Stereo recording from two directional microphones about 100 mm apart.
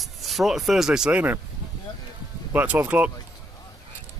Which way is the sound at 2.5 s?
20° right (ahead or behind).